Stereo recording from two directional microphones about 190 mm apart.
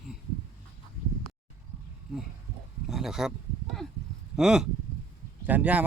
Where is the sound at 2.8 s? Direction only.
Centre (ahead or behind).